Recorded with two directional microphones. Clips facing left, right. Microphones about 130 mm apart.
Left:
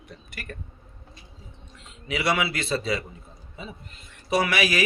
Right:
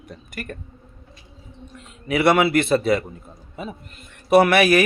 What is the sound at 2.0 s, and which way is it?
Speech, 55° right (ahead or behind).